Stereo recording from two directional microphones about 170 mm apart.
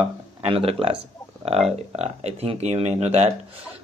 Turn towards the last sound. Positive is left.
turn(degrees=-40)  # may be behind; listen again after turning